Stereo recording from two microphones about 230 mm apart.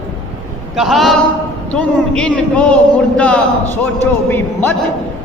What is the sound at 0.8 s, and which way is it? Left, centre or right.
Speech, centre.